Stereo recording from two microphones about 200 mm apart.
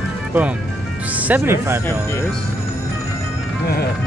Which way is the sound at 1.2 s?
10° right (ahead or behind).